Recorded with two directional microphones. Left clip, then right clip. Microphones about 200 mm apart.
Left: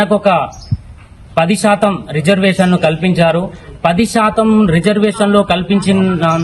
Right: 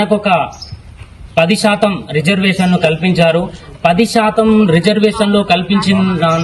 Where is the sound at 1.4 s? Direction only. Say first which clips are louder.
Even; 10° left (ahead or behind).